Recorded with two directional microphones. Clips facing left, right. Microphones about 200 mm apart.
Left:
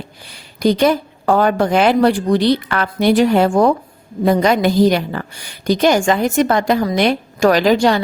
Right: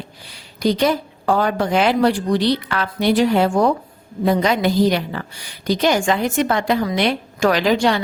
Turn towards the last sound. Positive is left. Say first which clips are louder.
# left 4 dB
turn(degrees=40)  # may be behind; listen again after turning